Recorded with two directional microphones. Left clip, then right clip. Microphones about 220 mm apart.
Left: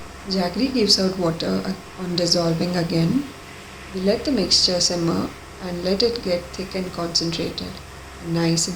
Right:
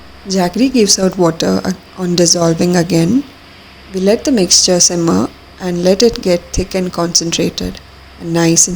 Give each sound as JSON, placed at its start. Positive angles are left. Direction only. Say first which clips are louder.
{"t": 0.3, "sound": "speech", "louder": "right 9 dB", "side_deg": -40}